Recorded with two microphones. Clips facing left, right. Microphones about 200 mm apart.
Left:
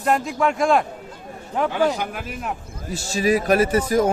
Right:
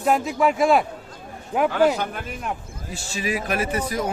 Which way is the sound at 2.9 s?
40° left (ahead or behind).